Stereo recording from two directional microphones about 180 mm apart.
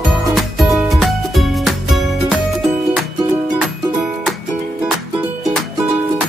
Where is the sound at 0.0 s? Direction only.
Centre (ahead or behind).